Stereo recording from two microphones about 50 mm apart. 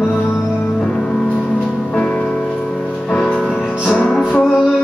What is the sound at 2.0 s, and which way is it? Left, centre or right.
Music, left.